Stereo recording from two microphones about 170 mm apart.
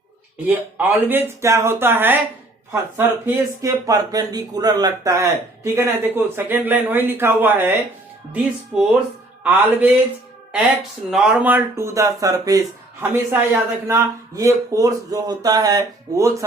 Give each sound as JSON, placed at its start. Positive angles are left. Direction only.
{"t": 0.4, "sound": "a man's voice", "side_deg": -10}
{"t": 3.2, "sound": "a man's voice", "side_deg": -15}
{"t": 11.1, "sound": "speech", "side_deg": -5}